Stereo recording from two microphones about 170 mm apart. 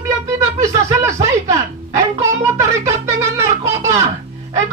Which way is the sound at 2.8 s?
15° right (ahead or behind).